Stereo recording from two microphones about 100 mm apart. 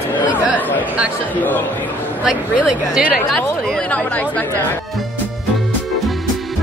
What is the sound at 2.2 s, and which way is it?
A woman's voice, 5° right (ahead or behind).